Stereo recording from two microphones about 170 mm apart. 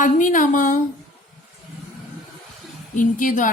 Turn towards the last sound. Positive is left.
turn(degrees=50)  # may be behind; listen again after turning